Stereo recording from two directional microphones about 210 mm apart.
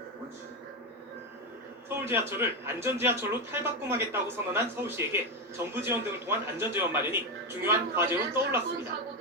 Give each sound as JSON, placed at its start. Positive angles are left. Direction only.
{"t": 2.0, "sound": "speech", "side_deg": -10}